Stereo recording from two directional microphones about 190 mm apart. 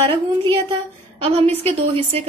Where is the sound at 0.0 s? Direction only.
25° right (ahead or behind).